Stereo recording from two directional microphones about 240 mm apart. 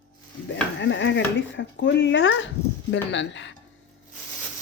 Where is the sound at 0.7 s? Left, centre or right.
Left.